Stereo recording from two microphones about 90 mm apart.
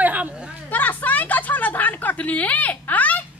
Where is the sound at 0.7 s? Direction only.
20° left (ahead or behind).